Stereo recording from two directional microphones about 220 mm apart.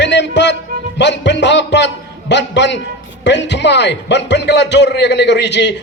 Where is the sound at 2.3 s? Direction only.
55° left (ahead or behind).